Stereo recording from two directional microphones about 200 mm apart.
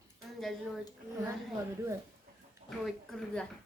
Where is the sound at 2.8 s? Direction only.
5° left (ahead or behind).